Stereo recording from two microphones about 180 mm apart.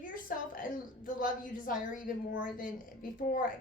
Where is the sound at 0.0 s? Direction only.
50° left (ahead or behind).